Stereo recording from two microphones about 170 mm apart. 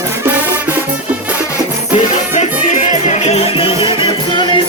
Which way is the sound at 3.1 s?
40° left (ahead or behind).